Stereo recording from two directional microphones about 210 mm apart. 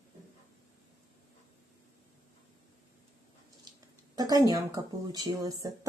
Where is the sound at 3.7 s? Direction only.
20° right (ahead or behind).